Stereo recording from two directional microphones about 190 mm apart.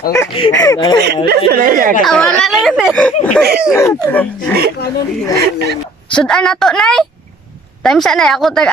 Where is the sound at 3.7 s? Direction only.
15° left (ahead or behind).